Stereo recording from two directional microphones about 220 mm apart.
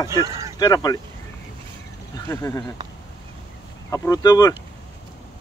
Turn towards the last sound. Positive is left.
turn(degrees=15)  # may be behind; listen again after turning